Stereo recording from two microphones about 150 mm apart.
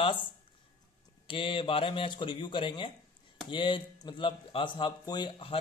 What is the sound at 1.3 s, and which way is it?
Speech, 35° left (ahead or behind).